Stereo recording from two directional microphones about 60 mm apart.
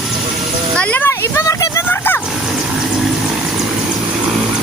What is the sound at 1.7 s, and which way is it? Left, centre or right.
Vehicle, left.